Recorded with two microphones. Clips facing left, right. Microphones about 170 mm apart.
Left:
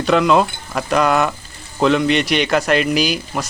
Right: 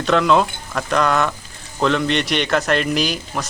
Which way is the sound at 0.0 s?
5° left (ahead or behind).